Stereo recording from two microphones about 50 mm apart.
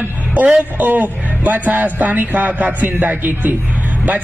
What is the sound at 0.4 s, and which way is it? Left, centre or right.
A man's voice, right.